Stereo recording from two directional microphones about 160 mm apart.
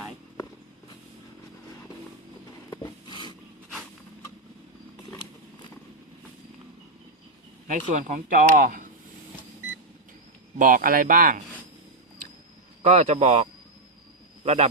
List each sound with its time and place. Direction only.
2.6 s a sound: 25° left (ahead or behind)
7.7 s speech: 50° right (ahead or behind)
10.6 s speech: 60° right (ahead or behind)
12.8 s a man's voice: 45° right (ahead or behind)